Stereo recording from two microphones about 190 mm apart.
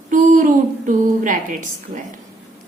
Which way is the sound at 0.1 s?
45° right (ahead or behind).